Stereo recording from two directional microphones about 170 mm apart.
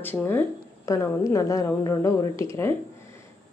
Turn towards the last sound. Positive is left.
turn(degrees=15)  # may be behind; listen again after turning